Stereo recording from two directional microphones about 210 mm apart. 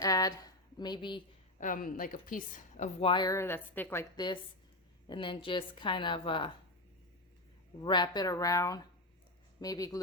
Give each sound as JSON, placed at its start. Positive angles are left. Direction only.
{"t": 0.0, "sound": "a sound", "side_deg": 15}
{"t": 1.5, "sound": "a woman's voice", "side_deg": 40}
{"t": 7.8, "sound": "speech", "side_deg": 20}